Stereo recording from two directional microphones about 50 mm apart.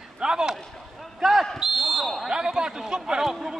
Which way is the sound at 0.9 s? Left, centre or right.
Centre.